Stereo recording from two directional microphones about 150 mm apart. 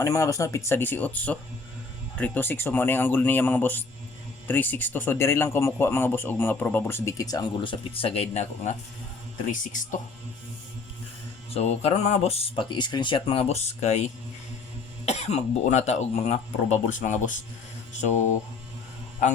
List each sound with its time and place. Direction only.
0.0 s a man's voice: 20° left (ahead or behind); by 8.7 s 45° left (ahead or behind)
11.5 s speech: 45° left (ahead or behind)
15.0 s speech: 45° left (ahead or behind)